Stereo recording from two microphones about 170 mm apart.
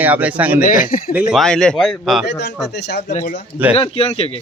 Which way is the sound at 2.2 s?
90° left.